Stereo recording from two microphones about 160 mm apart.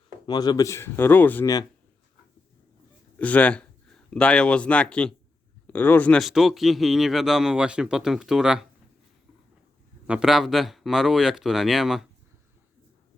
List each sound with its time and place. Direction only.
0.3 s speech: 25° left (ahead or behind)
3.2 s speech: 10° left (ahead or behind)
10.1 s speech: 5° right (ahead or behind)